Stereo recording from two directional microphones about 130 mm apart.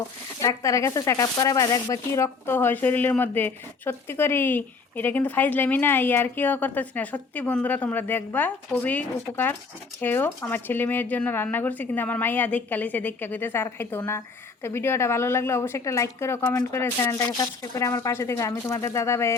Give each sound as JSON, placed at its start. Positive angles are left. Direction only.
{"t": 0.4, "sound": "a woman's voice", "side_deg": 25}